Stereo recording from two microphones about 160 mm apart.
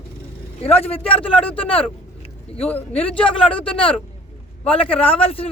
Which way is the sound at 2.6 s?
10° left (ahead or behind).